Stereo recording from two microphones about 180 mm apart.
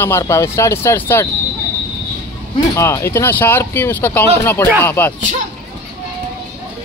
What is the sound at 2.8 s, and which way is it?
Speech, 15° left (ahead or behind).